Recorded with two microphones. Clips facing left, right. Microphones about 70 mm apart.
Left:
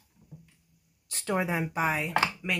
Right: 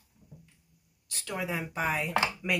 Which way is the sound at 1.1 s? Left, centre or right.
Left.